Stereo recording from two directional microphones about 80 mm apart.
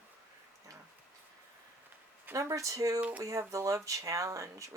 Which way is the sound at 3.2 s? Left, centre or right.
Right.